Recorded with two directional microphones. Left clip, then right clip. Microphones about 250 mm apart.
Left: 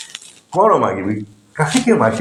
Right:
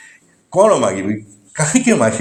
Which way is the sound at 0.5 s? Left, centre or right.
Right.